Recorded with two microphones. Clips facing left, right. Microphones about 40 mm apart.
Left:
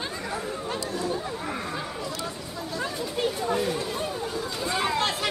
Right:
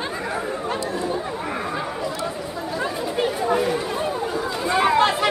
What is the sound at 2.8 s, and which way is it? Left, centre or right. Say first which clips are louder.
Chatter: right 4 dB; centre.